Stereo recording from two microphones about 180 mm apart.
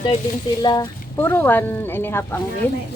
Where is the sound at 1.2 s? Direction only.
10° left (ahead or behind).